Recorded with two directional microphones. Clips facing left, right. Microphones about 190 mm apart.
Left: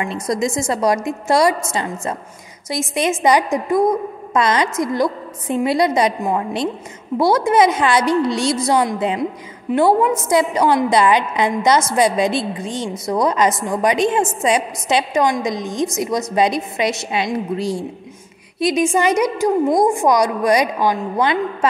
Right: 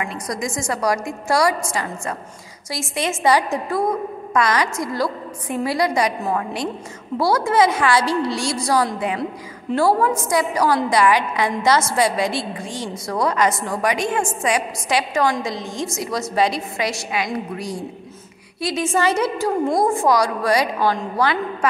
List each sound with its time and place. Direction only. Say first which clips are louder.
0.0 s a woman's voice: left 6 dB; 25° left (ahead or behind)